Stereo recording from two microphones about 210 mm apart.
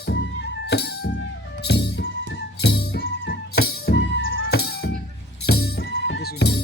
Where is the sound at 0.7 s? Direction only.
50° left (ahead or behind).